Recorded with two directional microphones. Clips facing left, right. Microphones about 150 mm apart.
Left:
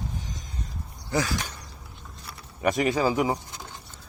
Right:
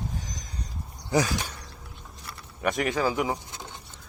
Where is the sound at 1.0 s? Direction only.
20° right (ahead or behind).